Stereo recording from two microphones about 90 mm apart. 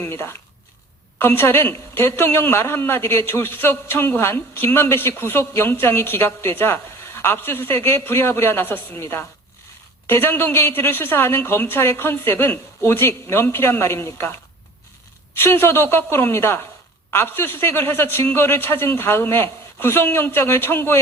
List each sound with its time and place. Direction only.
0.0 s a man's voice: 30° left (ahead or behind)
15.4 s a man's voice: 25° left (ahead or behind)